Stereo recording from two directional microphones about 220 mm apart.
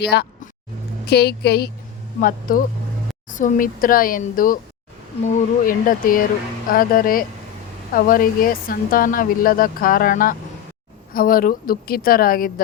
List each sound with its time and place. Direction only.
0.0 s a woman's voice: 50° left (ahead or behind)
3.2 s speech: 35° left (ahead or behind)